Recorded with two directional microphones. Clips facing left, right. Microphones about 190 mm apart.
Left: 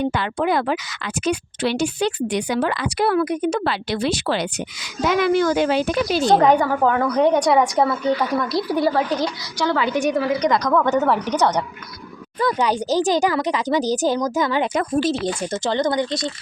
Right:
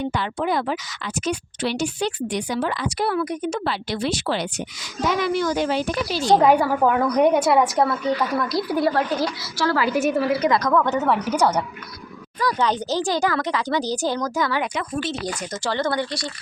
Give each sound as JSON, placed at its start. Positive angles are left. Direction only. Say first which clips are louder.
{"t": 0.1, "sound": "speech", "louder": "left 3 dB", "side_deg": 60}
{"t": 5.0, "sound": "speech", "louder": "left 4 dB", "side_deg": 55}
{"t": 6.2, "sound": "a woman's voice", "louder": "even", "side_deg": -10}
{"t": 12.5, "sound": "a woman's voice", "louder": "left 3 dB", "side_deg": 15}
{"t": 14.7, "sound": "speech", "louder": "left 7 dB", "side_deg": 40}
{"t": 15.2, "sound": "speech", "louder": "left 5 dB", "side_deg": 25}